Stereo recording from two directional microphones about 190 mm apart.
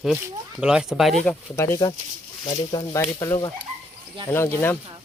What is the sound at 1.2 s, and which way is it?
Speech, 15° left (ahead or behind).